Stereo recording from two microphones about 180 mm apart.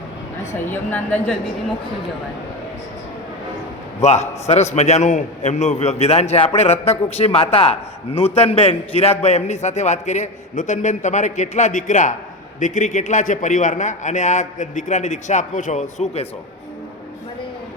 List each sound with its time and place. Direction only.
0.7 s a woman's voice: 10° left (ahead or behind)
4.0 s a man's voice: 40° left (ahead or behind)